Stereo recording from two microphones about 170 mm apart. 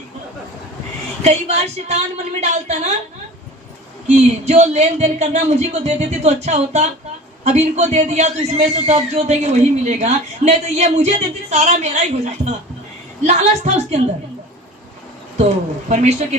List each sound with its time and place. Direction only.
1.2 s a man's voice: 40° right (ahead or behind)
4.0 s a man's voice: 40° right (ahead or behind)
15.4 s a man's voice: 40° right (ahead or behind)